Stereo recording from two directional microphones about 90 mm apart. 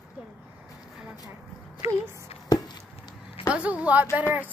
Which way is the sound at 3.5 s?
15° right (ahead or behind).